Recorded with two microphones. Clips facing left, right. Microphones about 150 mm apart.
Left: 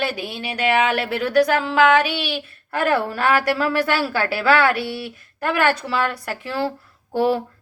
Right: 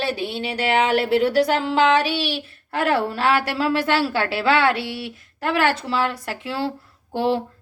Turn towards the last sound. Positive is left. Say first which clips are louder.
# left 2 dB
turn(degrees=-25)  # may be behind; listen again after turning